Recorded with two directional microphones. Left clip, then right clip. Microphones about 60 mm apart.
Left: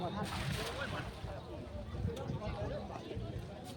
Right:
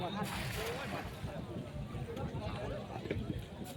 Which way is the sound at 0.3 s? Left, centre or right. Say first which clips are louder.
Right 1 dB; right.